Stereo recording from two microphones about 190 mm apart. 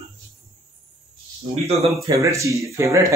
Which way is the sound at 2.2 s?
15° right (ahead or behind).